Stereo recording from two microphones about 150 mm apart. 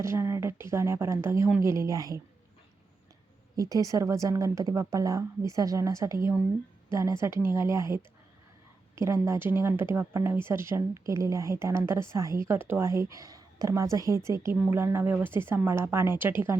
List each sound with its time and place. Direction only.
0.0 s a woman's voice: 20° right (ahead or behind)
3.5 s a woman's voice: 25° right (ahead or behind)